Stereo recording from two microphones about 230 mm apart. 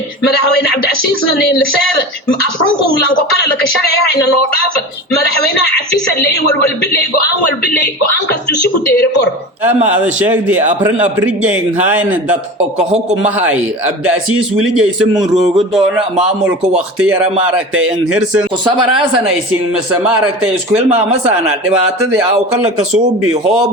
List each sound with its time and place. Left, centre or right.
8.3 s speech: left
9.6 s a man's voice: centre
15.1 s a man's voice: centre
15.5 s speech: centre
19.9 s a man's voice: centre
23.3 s a man's voice: right